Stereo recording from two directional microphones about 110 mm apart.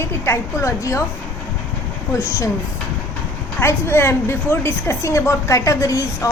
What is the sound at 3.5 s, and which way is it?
A woman's voice, 20° left (ahead or behind).